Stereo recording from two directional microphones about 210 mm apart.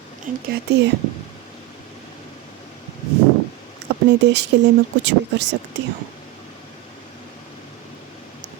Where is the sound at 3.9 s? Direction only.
55° right (ahead or behind).